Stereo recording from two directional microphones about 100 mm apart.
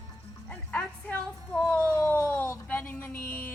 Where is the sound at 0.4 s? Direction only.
15° left (ahead or behind).